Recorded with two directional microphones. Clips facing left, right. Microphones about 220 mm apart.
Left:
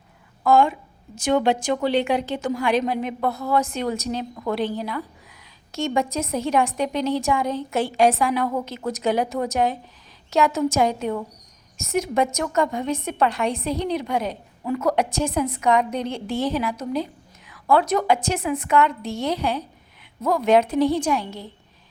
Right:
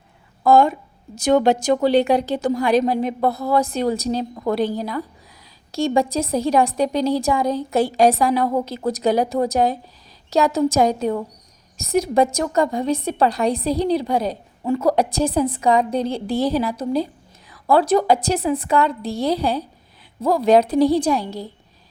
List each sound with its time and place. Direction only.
0.4 s a woman's voice: 40° right (ahead or behind)